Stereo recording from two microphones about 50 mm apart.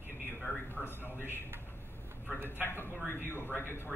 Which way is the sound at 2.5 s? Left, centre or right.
Left.